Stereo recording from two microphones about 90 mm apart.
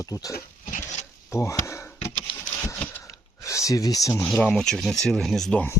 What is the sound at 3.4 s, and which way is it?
Speech, 35° left (ahead or behind).